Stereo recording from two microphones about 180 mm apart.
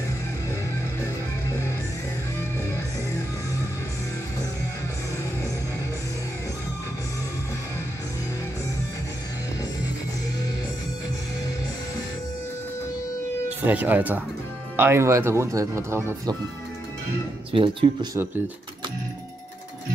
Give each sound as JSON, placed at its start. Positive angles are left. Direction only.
{"t": 13.7, "sound": "speech", "side_deg": -10}
{"t": 17.5, "sound": "speech", "side_deg": -30}